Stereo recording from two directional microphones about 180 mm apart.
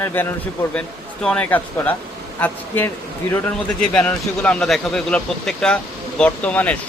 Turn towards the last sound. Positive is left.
turn(degrees=10)  # may be behind; listen again after turning